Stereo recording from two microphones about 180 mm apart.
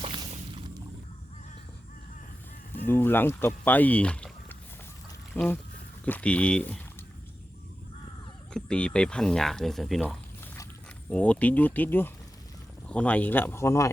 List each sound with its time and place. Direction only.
0.0 s squish: 30° right (ahead or behind)
2.7 s speech: 10° left (ahead or behind)
8.5 s speech: 5° left (ahead or behind)